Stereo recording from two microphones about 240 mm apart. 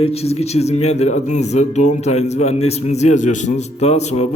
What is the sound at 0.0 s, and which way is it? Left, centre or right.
Speech, left.